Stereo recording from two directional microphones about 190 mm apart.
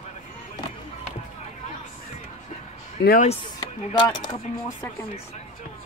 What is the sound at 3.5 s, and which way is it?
Speech, 20° left (ahead or behind).